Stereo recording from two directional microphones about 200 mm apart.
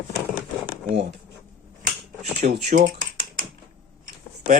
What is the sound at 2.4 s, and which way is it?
Speech, 40° right (ahead or behind).